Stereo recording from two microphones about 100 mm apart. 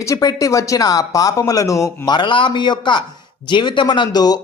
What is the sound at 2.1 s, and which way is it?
Speech, 50° left (ahead or behind).